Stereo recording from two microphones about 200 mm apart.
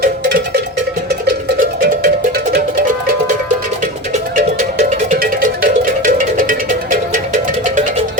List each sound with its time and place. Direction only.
4.4 s music: 40° right (ahead or behind)